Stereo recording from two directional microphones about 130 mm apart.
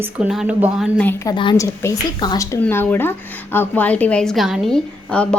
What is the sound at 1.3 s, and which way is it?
A woman's voice, 35° left (ahead or behind).